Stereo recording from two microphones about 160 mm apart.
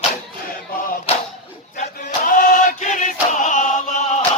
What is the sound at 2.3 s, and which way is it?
Chant, 55° left (ahead or behind).